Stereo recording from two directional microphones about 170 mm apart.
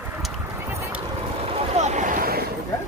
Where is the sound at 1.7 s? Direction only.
45° right (ahead or behind).